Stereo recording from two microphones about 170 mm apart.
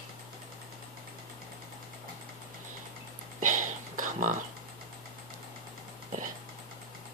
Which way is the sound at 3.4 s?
50° right (ahead or behind).